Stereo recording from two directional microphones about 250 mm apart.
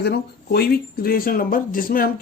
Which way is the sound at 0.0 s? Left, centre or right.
Left.